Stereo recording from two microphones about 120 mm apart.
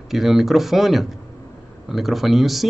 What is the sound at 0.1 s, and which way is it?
Speech, centre (ahead or behind).